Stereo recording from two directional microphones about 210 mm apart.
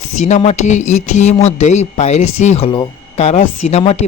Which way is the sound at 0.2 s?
35° left (ahead or behind).